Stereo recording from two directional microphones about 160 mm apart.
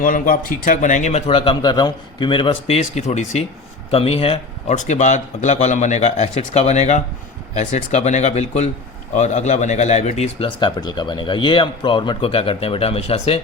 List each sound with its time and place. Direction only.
0.0 s speech: 60° left (ahead or behind); by 10.5 s 45° left (ahead or behind)
10.6 s speech: 25° left (ahead or behind)